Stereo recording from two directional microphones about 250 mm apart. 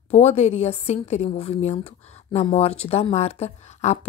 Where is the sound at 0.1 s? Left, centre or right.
Left.